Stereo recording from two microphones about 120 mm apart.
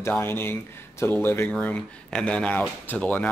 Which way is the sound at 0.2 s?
20° left (ahead or behind).